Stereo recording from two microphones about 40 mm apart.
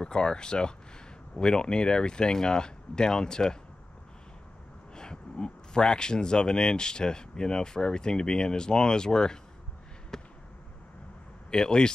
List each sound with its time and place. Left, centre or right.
0.0 s speech: left
4.9 s speech: centre
10.1 s basketball bounce: centre
11.5 s speech: centre